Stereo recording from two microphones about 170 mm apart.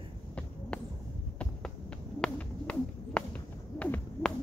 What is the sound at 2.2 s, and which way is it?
Bird, 5° left (ahead or behind).